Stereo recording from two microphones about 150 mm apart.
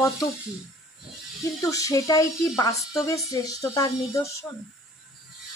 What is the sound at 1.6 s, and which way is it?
Speech, 20° left (ahead or behind).